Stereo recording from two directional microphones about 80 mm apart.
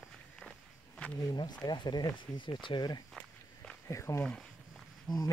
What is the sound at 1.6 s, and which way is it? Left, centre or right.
Speech, left.